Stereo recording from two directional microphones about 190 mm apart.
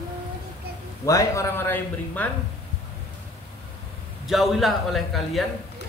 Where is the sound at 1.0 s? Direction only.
15° left (ahead or behind).